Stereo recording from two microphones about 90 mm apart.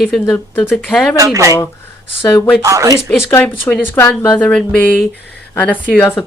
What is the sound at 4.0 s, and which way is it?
Speech, 25° left (ahead or behind).